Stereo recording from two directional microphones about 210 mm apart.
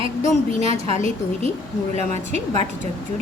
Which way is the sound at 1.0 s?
35° left (ahead or behind).